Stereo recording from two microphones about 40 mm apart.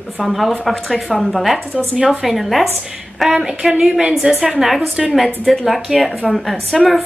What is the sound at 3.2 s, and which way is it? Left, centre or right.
A woman's voice, centre.